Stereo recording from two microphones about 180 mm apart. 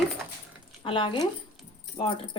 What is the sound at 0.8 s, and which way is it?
Speech, 25° left (ahead or behind).